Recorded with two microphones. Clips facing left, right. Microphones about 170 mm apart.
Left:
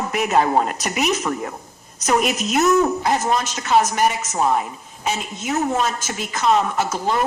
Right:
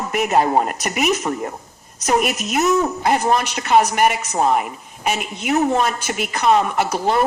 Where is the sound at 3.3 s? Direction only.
60° right (ahead or behind).